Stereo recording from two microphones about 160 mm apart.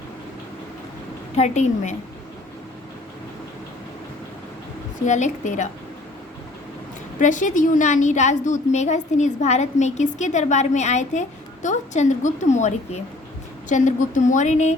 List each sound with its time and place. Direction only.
1.4 s a woman's voice: 45° left (ahead or behind)
5.0 s a woman's voice: 50° left (ahead or behind)
7.2 s a woman's voice: 50° left (ahead or behind)